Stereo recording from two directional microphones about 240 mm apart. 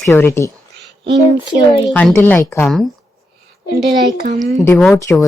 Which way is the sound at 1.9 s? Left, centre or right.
Centre.